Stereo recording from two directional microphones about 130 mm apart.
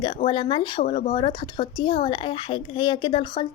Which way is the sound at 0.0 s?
40° left (ahead or behind).